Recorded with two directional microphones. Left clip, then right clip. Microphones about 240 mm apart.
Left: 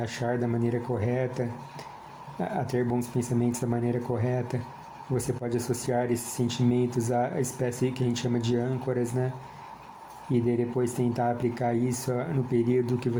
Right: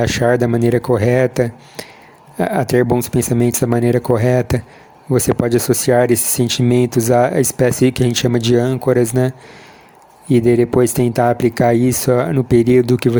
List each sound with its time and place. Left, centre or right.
0.0 s speech: right
10.3 s speech: right